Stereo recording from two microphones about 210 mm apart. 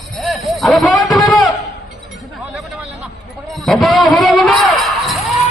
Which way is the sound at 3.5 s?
Centre (ahead or behind).